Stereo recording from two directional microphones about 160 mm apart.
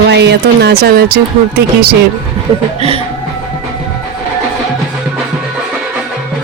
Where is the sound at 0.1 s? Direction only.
90° right.